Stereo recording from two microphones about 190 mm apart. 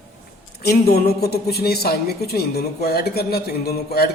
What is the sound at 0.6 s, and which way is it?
A woman's voice, 55° left (ahead or behind).